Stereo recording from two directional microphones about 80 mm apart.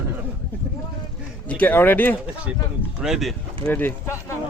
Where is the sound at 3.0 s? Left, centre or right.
Centre.